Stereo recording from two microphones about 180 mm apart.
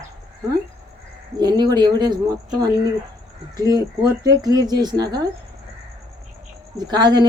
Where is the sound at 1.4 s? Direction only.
20° right (ahead or behind).